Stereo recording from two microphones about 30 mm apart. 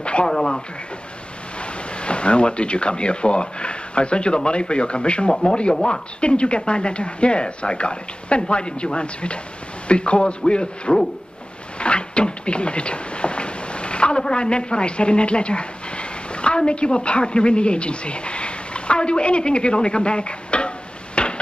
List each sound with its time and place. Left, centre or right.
0.0 s a sound: left
0.3 s speech: left
1.6 s speech: left
5.3 s speech: left
11.8 s a sound: left
14.2 s speech: left